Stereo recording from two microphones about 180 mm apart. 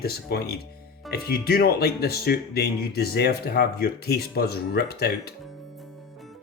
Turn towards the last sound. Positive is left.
turn(degrees=60)  # may be behind; listen again after turning